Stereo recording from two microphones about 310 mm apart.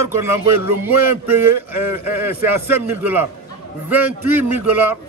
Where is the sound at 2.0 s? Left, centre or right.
Centre.